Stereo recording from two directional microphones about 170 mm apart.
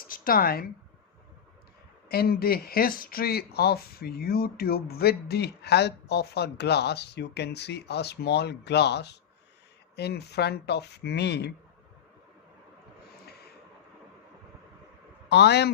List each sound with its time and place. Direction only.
0.0 s speech: 55° left (ahead or behind)
2.0 s speech: 65° left (ahead or behind)
15.3 s speech: 80° left